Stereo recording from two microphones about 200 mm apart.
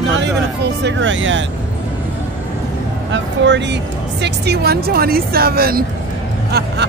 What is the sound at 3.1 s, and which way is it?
Speech, 60° right (ahead or behind).